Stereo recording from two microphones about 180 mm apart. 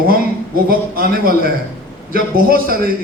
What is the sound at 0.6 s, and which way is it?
A man's voice, 55° right (ahead or behind).